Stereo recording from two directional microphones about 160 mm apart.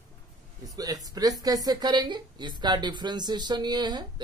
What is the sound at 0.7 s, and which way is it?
A man's voice, 20° right (ahead or behind).